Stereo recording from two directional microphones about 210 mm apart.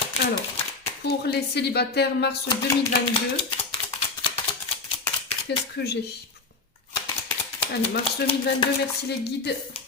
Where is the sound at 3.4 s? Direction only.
25° left (ahead or behind).